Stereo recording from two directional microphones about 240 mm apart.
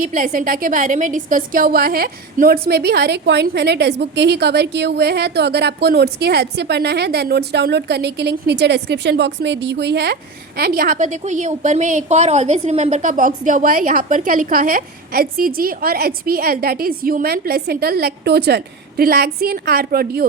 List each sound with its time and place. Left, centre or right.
0.0 s a woman's voice: right